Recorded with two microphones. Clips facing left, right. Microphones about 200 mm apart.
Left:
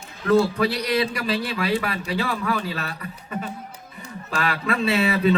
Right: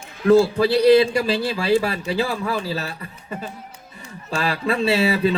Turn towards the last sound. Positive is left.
turn(degrees=-30)  # may be behind; listen again after turning